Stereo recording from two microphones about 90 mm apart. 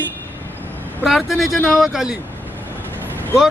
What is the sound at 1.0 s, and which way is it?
Speech, centre (ahead or behind).